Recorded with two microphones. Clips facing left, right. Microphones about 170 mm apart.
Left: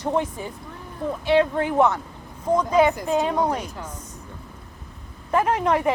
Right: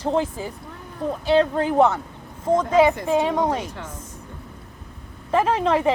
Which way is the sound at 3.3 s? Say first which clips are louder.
Right 1 dB; 90° right.